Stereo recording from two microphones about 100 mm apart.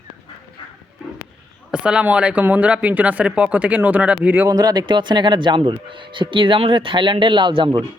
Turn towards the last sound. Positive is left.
turn(degrees=-55)  # may be behind; listen again after turning